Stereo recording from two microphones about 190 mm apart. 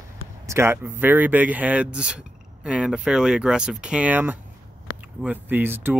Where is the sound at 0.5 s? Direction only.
15° right (ahead or behind).